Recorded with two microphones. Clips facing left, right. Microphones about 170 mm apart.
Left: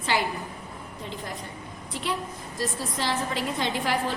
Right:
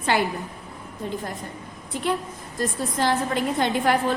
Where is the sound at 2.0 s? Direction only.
50° right (ahead or behind).